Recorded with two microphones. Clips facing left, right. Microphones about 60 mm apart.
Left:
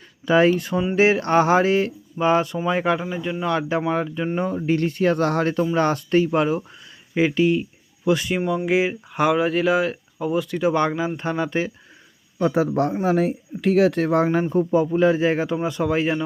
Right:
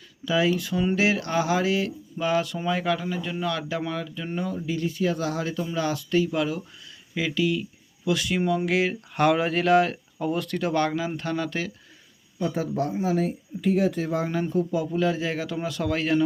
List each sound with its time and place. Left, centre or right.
0.3 s speech: left
8.4 s speech: centre
8.6 s speech: centre
12.4 s speech: left
12.9 s speech: left
14.5 s speech: left